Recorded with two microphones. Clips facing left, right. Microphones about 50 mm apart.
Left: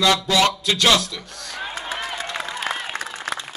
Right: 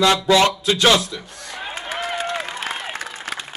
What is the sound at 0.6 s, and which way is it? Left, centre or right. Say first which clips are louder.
Speech: right 2 dB; right.